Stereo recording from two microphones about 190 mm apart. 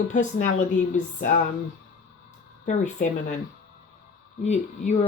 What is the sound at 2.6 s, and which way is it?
Speech, 40° left (ahead or behind).